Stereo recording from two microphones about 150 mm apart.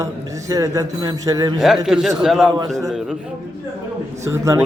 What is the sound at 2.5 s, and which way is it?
Speech, 20° right (ahead or behind).